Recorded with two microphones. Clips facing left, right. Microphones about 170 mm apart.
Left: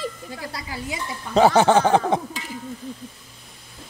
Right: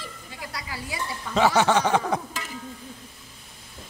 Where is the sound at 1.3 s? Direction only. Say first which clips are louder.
Left 5 dB; 35° left (ahead or behind).